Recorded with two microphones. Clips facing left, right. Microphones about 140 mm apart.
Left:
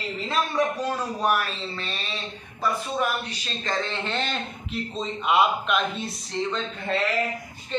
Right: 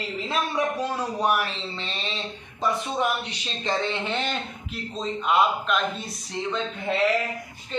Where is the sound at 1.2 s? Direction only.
20° right (ahead or behind); by 6.1 s centre (ahead or behind).